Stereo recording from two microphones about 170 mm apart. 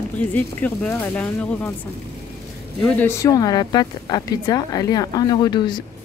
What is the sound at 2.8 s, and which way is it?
Speech, 10° left (ahead or behind).